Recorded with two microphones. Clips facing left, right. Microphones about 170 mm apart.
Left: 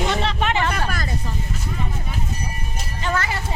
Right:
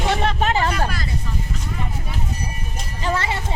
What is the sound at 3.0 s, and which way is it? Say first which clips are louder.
Music: right 1 dB; 30° right (ahead or behind).